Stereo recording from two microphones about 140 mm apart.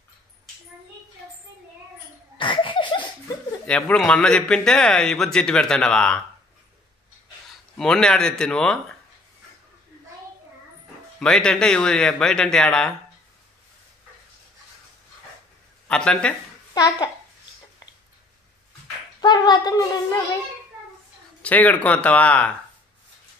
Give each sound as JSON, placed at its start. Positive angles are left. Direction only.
{"t": 2.3, "sound": "laughter", "side_deg": 35}
{"t": 3.9, "sound": "a man's voice", "side_deg": 5}
{"t": 7.7, "sound": "a man's voice", "side_deg": 5}
{"t": 11.1, "sound": "a man's voice", "side_deg": 5}
{"t": 15.9, "sound": "speech", "side_deg": 5}
{"t": 16.7, "sound": "speech", "side_deg": 25}
{"t": 19.2, "sound": "speech", "side_deg": 30}
{"t": 21.4, "sound": "speech", "side_deg": 10}